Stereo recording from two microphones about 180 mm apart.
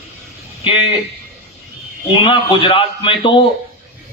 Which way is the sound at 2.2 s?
30° left (ahead or behind).